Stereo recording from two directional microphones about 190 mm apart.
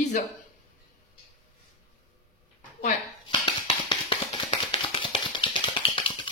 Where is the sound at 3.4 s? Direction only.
30° left (ahead or behind).